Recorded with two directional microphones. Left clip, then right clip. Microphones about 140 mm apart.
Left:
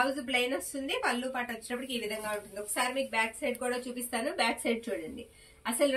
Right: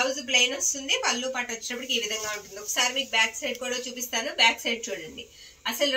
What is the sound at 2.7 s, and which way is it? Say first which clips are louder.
A woman's voice: right 6 dB; 20° left (ahead or behind).